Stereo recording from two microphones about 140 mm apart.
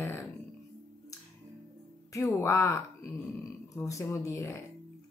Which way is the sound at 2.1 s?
20° left (ahead or behind).